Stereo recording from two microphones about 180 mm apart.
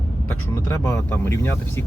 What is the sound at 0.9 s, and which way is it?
Speech, 15° left (ahead or behind).